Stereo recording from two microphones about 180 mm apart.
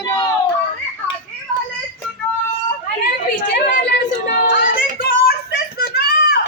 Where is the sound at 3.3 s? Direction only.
60° left (ahead or behind).